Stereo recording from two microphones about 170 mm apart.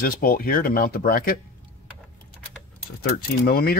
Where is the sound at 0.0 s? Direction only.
60° left (ahead or behind).